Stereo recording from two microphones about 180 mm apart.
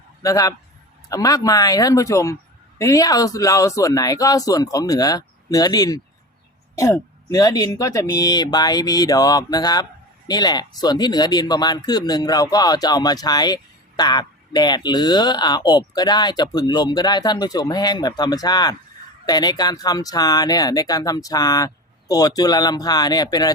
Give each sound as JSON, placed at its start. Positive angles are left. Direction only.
{"t": 0.2, "sound": "speech", "side_deg": 20}